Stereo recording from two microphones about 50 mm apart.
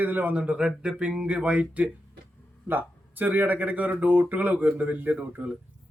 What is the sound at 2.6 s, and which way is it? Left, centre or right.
A man's voice, right.